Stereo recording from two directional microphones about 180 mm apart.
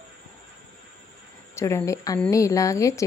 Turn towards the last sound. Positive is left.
turn(degrees=15)  # may be behind; listen again after turning